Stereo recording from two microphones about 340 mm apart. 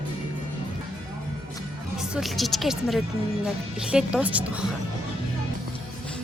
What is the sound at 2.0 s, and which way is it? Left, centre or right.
Speech, centre.